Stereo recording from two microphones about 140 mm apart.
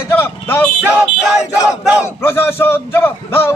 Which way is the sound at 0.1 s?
15° left (ahead or behind).